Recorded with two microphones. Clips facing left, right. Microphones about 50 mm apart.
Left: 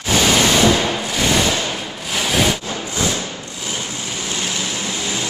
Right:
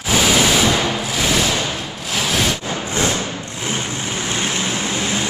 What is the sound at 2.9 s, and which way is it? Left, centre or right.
Vehicle, right.